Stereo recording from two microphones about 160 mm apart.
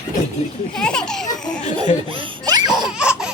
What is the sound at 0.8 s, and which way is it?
Speech, 5° left (ahead or behind).